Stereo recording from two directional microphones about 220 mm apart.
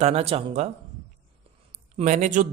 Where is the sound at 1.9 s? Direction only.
35° right (ahead or behind).